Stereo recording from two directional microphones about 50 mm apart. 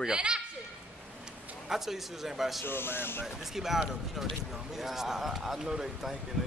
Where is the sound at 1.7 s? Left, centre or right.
Centre.